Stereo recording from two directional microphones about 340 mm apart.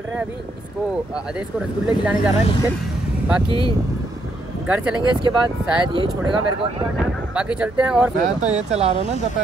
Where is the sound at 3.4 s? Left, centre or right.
Centre.